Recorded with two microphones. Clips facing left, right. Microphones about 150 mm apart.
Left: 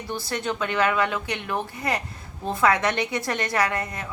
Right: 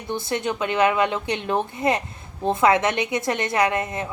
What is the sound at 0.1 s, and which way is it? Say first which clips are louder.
A woman's voice: right 4 dB; 20° right (ahead or behind).